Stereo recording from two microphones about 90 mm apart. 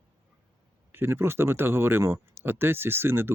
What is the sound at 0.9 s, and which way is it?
Speech, 25° right (ahead or behind).